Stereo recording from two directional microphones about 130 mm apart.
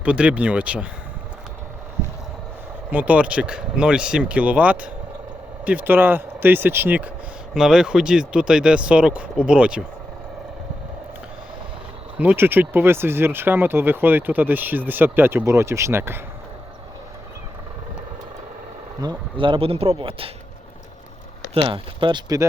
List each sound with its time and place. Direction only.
0.0 s speech: 10° right (ahead or behind)
2.9 s speech: 10° right (ahead or behind)
12.1 s speech: 10° right (ahead or behind)
19.0 s speech: 40° right (ahead or behind)
21.5 s speech: 40° right (ahead or behind)